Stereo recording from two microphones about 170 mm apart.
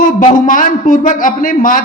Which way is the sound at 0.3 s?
50° left (ahead or behind).